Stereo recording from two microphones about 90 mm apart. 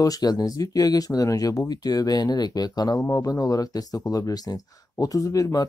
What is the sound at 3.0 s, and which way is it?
Speech, 35° left (ahead or behind).